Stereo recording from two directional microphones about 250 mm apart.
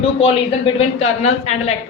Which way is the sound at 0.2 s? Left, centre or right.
Left.